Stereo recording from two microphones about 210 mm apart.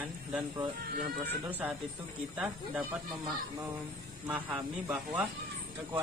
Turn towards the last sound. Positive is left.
turn(degrees=-10)  # may be behind; listen again after turning